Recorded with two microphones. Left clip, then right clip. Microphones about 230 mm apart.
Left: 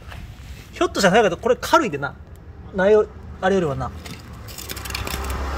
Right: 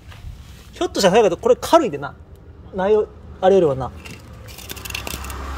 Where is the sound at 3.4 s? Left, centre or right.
Centre.